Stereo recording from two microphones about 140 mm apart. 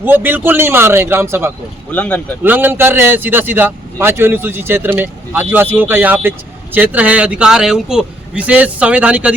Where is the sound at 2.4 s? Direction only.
15° right (ahead or behind).